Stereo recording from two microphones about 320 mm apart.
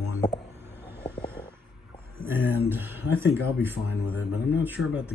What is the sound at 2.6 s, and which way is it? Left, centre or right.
Speech, centre.